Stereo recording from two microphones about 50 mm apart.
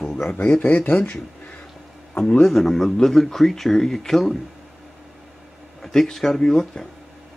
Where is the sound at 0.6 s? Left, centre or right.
Left.